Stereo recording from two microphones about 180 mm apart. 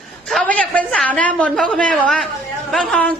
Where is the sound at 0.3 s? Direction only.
5° left (ahead or behind).